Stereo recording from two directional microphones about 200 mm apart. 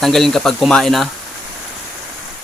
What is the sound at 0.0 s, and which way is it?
Speech, centre (ahead or behind).